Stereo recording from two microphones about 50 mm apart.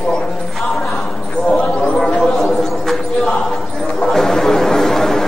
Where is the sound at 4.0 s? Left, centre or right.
Centre.